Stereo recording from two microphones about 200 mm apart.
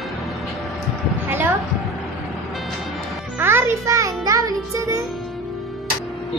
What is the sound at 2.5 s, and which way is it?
Music, centre (ahead or behind).